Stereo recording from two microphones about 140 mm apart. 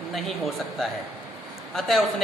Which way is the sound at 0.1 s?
Centre (ahead or behind).